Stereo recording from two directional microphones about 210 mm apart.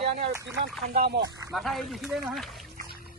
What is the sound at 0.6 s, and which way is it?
Speech, 45° right (ahead or behind).